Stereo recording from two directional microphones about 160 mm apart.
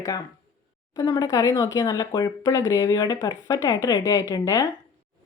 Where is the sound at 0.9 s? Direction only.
20° left (ahead or behind).